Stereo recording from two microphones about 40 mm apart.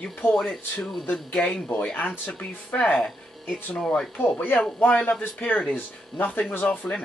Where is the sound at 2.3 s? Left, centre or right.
Left.